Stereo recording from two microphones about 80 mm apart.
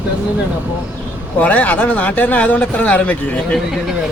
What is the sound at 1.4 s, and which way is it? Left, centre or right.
Speech, centre.